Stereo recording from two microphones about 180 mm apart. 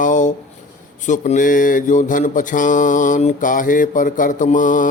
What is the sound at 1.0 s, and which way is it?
Speech, 45° left (ahead or behind).